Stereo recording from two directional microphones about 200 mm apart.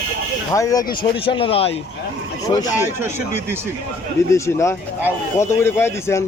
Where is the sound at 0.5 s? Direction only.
15° left (ahead or behind).